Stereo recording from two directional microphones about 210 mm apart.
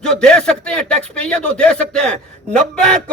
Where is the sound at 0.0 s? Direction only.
5° left (ahead or behind).